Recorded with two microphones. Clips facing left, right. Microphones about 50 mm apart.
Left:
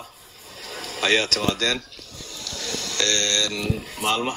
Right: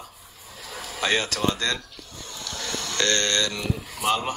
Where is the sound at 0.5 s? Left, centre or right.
Left.